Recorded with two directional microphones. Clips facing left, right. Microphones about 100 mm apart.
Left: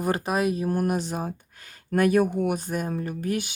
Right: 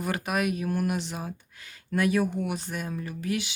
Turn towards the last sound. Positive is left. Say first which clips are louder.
# left 3 dB
turn(degrees=45)  # may be behind; listen again after turning